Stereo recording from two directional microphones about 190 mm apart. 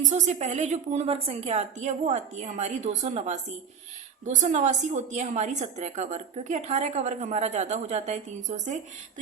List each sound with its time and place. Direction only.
0.0 s a woman's voice: 40° right (ahead or behind)